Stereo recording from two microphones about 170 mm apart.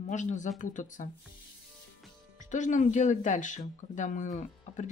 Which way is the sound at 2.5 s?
45° left (ahead or behind).